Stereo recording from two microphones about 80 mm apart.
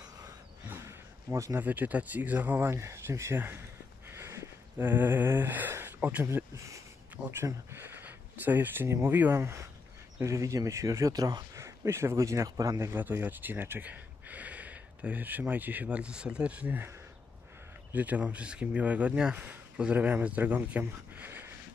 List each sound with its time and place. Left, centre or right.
0.7 s a sound: right
1.6 s speech: right
4.1 s a sound: right
4.7 s speech: right
6.2 s speech: right
7.4 s speech: right
11.6 s speech: right
12.9 s speech: right
17.9 s speech: centre
19.3 s speech: right